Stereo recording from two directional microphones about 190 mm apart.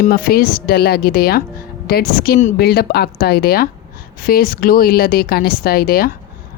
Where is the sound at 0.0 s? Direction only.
50° left (ahead or behind).